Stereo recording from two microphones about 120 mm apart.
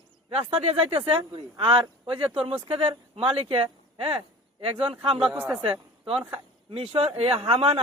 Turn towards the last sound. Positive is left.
turn(degrees=-50)  # may be behind; listen again after turning